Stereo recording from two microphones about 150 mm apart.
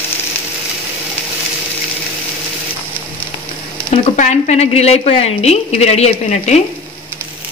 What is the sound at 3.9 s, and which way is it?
A woman's voice, 55° left (ahead or behind).